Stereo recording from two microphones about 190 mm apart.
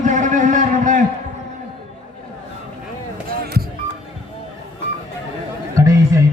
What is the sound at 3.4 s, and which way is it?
Music, 55° right (ahead or behind).